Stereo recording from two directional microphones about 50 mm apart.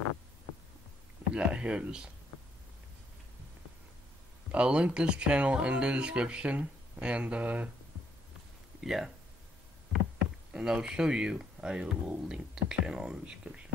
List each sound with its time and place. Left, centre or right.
1.3 s speech: right
4.5 s speech: right
8.8 s speech: centre
10.5 s speech: centre